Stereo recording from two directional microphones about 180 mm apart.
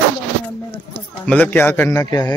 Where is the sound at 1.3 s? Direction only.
10° left (ahead or behind).